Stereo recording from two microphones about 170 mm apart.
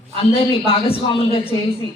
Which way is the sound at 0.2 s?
35° left (ahead or behind).